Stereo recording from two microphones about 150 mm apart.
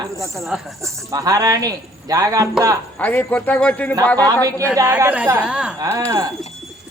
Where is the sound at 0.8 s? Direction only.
20° right (ahead or behind).